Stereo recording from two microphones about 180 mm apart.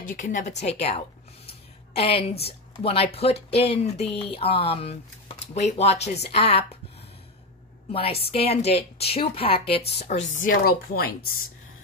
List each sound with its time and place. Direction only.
0.0 s a woman's voice: 50° left (ahead or behind)
7.9 s a woman's voice: 30° left (ahead or behind)
10.4 s speech: 55° left (ahead or behind)